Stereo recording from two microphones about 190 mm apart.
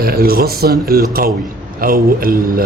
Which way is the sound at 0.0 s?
50° right (ahead or behind).